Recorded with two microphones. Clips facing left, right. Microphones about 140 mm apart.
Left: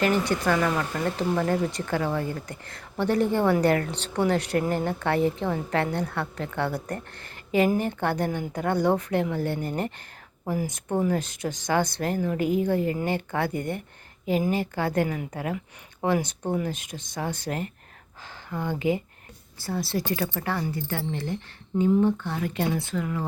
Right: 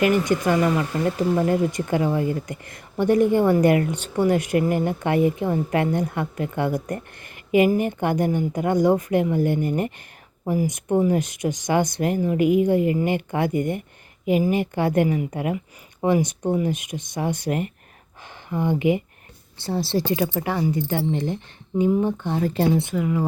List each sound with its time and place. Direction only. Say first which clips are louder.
0.0 s speech: right 4 dB; 15° right (ahead or behind)
16.9 s speech: right 7 dB; 25° right (ahead or behind)
18.4 s speech: right 5 dB; 20° right (ahead or behind)
22.4 s speech: right 6 dB; 35° right (ahead or behind)
23.0 s speech: right 6 dB; 10° right (ahead or behind)